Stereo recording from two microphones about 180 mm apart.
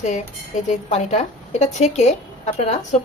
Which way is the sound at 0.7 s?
40° left (ahead or behind).